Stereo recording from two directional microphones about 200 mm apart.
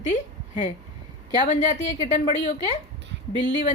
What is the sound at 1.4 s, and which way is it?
A woman's voice, 35° left (ahead or behind).